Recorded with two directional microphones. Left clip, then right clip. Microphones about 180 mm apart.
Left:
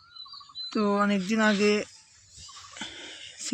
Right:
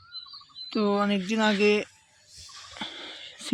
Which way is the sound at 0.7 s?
5° left (ahead or behind).